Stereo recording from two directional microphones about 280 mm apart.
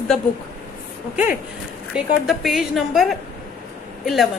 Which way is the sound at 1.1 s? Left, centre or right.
Left.